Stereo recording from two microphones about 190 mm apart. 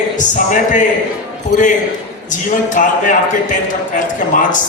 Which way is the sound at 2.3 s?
40° left (ahead or behind).